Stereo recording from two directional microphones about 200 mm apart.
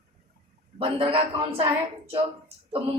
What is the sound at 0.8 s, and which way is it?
A woman's voice, 25° right (ahead or behind).